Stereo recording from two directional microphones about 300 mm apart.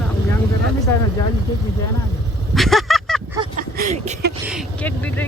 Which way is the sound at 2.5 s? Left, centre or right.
Centre.